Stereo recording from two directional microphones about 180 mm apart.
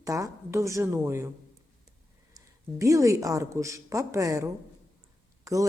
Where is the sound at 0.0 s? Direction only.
20° right (ahead or behind).